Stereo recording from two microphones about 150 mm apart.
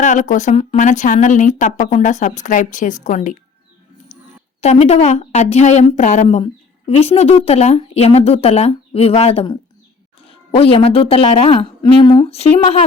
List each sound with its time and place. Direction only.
0.0 s a woman's voice: 55° left (ahead or behind)
4.6 s a woman's voice: 45° left (ahead or behind)